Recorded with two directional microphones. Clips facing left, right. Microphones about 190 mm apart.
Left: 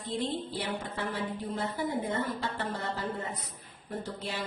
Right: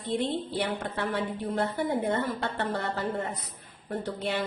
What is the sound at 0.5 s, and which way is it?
A woman's voice, 65° right (ahead or behind).